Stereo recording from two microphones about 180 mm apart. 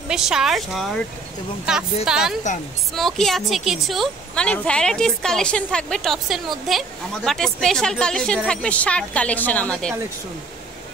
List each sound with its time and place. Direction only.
0.1 s a woman's voice: 5° right (ahead or behind)
2.0 s a woman's voice: 5° right (ahead or behind)